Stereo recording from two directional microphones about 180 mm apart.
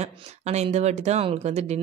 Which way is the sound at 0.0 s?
35° right (ahead or behind).